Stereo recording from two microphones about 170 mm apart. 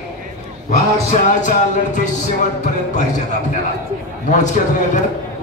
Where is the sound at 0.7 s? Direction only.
45° left (ahead or behind).